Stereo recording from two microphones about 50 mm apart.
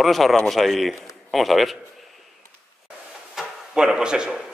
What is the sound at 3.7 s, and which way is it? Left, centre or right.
Speech, centre.